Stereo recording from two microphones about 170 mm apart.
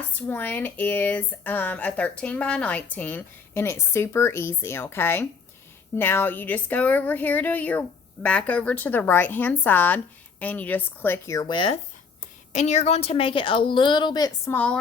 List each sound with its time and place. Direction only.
0.1 s speech: 10° left (ahead or behind); by 11.8 s 30° left (ahead or behind)
12.5 s a woman's voice: 40° left (ahead or behind); by 14.5 s 25° left (ahead or behind)
14.5 s speech: 10° left (ahead or behind)